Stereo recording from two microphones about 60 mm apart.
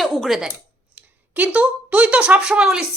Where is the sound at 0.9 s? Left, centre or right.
Right.